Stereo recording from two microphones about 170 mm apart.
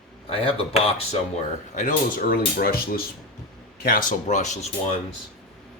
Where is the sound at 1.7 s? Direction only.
50° left (ahead or behind).